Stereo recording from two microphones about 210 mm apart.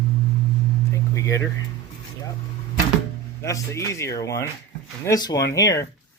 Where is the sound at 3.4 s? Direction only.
15° left (ahead or behind).